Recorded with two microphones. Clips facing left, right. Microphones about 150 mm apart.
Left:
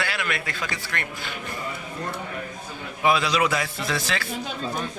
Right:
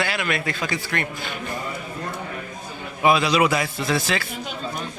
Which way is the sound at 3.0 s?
15° right (ahead or behind).